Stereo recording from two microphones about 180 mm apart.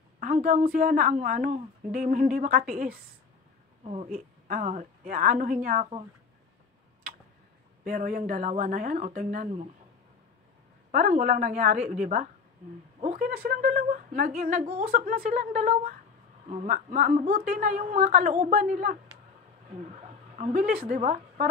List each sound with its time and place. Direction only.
0.2 s a woman's voice: 50° right (ahead or behind)
3.8 s speech: 35° right (ahead or behind)
4.5 s a woman's voice: 45° right (ahead or behind)
7.8 s a woman's voice: 50° right (ahead or behind)
10.9 s a woman's voice: 45° right (ahead or behind)